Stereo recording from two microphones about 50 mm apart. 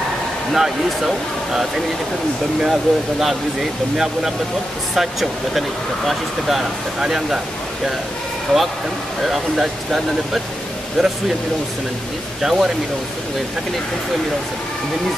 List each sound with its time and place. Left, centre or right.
0.5 s speech: centre
4.9 s speech: centre
8.5 s speech: centre
9.2 s speech: centre
12.4 s speech: centre